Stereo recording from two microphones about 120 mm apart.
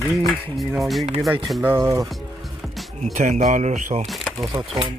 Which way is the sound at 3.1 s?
90° right.